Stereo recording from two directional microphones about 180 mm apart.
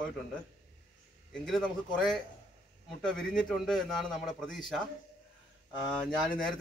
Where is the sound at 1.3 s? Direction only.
5° left (ahead or behind).